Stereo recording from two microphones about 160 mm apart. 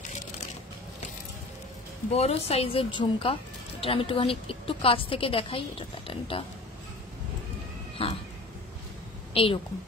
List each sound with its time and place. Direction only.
2.1 s a woman's voice: 40° left (ahead or behind)
8.0 s a woman's voice: 35° left (ahead or behind)
9.3 s a woman's voice: 35° left (ahead or behind)